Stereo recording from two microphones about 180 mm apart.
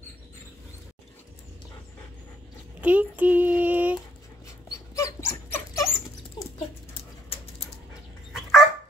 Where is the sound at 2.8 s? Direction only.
10° right (ahead or behind).